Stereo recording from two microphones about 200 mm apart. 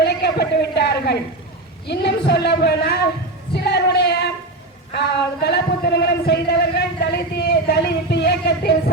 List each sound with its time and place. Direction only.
0.0 s a sound: 55° left (ahead or behind)
1.9 s speech: 55° left (ahead or behind)
3.5 s female singing: 55° left (ahead or behind)
4.9 s speech: 55° left (ahead or behind)